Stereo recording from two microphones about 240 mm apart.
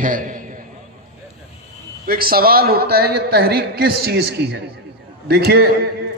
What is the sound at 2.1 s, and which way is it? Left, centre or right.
A man's voice, right.